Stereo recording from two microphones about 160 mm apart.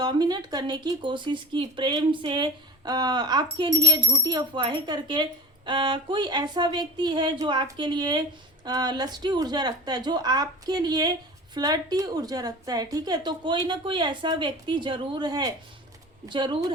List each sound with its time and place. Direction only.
0.0 s speech: 25° right (ahead or behind)